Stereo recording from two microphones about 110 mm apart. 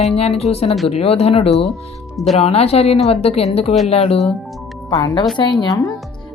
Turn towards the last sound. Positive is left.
turn(degrees=45)  # may be behind; listen again after turning